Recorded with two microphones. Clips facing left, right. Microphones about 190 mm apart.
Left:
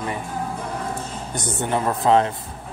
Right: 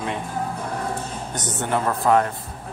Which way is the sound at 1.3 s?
10° left (ahead or behind).